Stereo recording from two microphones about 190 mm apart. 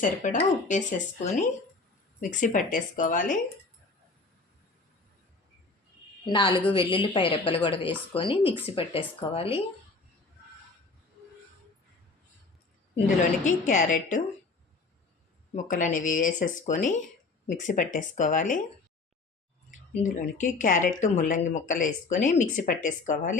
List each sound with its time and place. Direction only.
0.0 s speech: 40° left (ahead or behind)
6.2 s a woman's voice: 25° left (ahead or behind)
13.4 s speech: 40° left (ahead or behind)
15.5 s speech: 45° left (ahead or behind)
20.0 s speech: 40° left (ahead or behind)